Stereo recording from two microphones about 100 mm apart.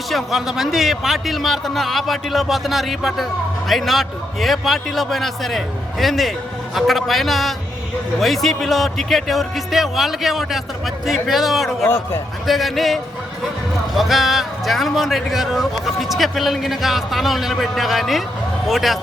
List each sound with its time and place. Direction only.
0.1 s speech: centre (ahead or behind)
11.9 s a man's voice: 20° left (ahead or behind)
12.5 s speech: centre (ahead or behind)